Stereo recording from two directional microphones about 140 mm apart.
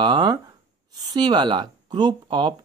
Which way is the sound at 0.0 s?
35° right (ahead or behind).